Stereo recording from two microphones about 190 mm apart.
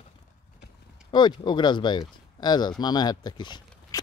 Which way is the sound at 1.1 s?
25° left (ahead or behind).